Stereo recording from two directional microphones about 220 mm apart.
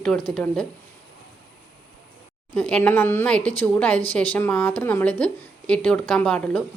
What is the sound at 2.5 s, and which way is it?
A woman's voice, 5° left (ahead or behind).